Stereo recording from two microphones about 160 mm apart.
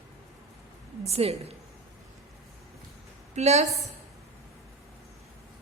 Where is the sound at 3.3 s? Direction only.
45° right (ahead or behind).